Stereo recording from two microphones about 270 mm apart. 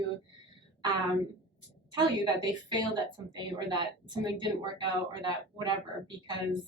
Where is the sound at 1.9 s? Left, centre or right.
Centre.